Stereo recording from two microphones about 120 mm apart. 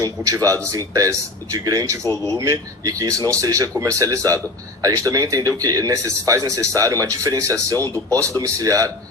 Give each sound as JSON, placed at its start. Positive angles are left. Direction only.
{"t": 0.0, "sound": "speech", "side_deg": -30}